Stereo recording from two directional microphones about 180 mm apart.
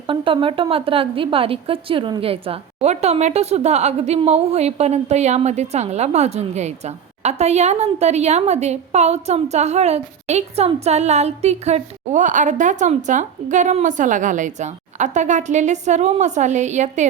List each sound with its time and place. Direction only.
0.1 s a woman's voice: 30° right (ahead or behind)